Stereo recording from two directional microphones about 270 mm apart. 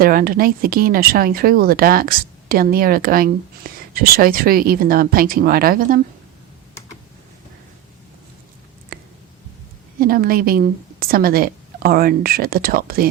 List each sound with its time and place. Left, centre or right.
0.0 s speech: right
10.0 s speech: right